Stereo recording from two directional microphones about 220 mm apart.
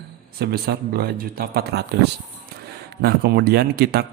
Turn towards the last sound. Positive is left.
turn(degrees=-45)  # may be behind; listen again after turning